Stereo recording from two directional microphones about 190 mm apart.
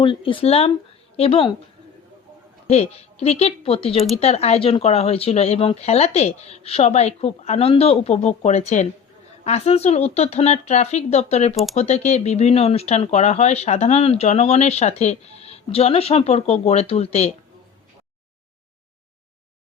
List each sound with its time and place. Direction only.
0.0 s speech: 25° left (ahead or behind)
2.6 s speech: 30° left (ahead or behind)